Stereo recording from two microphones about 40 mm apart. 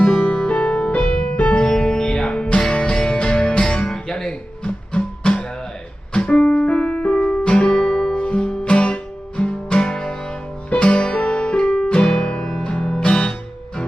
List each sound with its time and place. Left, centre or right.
0.0 s music: centre
0.3 s music: left
1.0 s music: centre
1.6 s music: centre
6.2 s piano: left
6.7 s music: left; by 8.2 s centre
8.2 s music: left